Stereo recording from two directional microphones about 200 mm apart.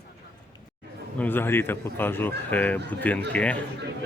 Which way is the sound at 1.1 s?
10° left (ahead or behind).